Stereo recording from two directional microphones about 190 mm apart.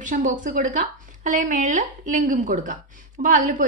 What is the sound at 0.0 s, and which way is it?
A woman's voice, 45° right (ahead or behind).